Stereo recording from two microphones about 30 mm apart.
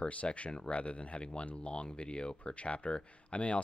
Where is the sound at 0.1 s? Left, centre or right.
Left.